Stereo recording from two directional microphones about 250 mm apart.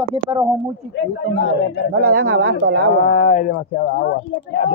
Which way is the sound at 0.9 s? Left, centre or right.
Left.